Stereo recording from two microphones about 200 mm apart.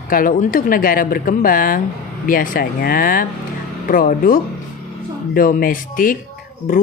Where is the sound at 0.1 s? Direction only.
45° left (ahead or behind).